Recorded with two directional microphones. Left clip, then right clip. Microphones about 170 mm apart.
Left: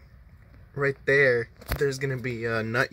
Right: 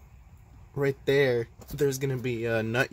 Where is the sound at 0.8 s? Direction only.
20° right (ahead or behind).